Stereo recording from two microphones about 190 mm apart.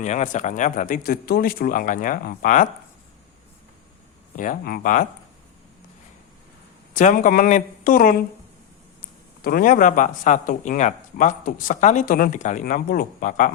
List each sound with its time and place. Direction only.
0.0 s speech: 40° left (ahead or behind)
4.4 s speech: 50° left (ahead or behind)
6.9 s speech: 45° left (ahead or behind)
9.4 s speech: 50° left (ahead or behind)